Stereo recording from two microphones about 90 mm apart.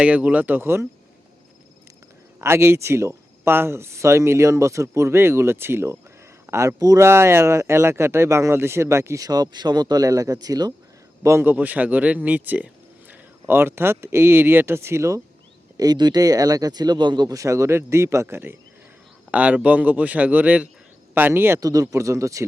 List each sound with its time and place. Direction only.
0.0 s speech: 15° right (ahead or behind)
2.4 s speech: 30° right (ahead or behind)
7.0 s speech: 30° right (ahead or behind); by 10.8 s 45° right (ahead or behind)
11.2 s speech: 30° right (ahead or behind)
15.8 s speech: 50° right (ahead or behind)
17.3 s speech: 35° right (ahead or behind)
19.3 s speech: 15° right (ahead or behind)
21.6 s speech: 40° right (ahead or behind)